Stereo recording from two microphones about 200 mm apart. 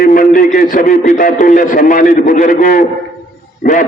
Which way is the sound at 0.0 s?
45° left (ahead or behind).